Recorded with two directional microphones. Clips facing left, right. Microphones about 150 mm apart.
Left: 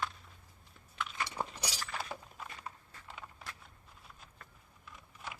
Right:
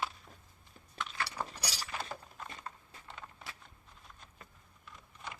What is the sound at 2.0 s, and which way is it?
Horse, 5° left (ahead or behind).